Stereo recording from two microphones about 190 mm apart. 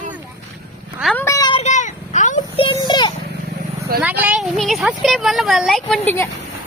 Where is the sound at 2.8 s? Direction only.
25° left (ahead or behind).